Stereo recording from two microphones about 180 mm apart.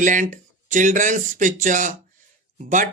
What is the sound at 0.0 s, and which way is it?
Speech, 45° right (ahead or behind).